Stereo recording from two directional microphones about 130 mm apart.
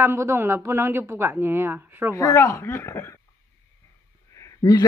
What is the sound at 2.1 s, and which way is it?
Speech, 25° left (ahead or behind).